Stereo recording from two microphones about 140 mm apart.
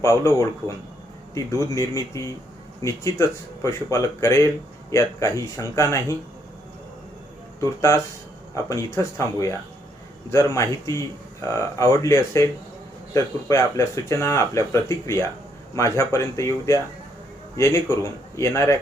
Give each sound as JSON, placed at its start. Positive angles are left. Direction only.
{"t": 0.0, "sound": "speech", "side_deg": 20}
{"t": 7.6, "sound": "speech", "side_deg": 20}